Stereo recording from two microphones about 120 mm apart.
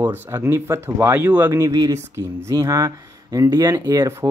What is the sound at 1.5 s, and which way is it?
Speech, 30° right (ahead or behind).